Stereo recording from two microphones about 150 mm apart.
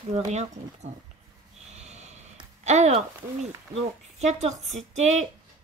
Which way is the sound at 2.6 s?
50° right (ahead or behind).